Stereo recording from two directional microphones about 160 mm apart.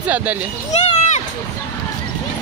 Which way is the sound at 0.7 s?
45° left (ahead or behind).